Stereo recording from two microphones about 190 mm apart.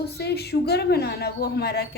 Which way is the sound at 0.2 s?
60° left (ahead or behind).